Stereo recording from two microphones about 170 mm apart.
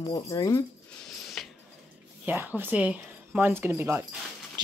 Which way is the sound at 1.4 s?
5° left (ahead or behind).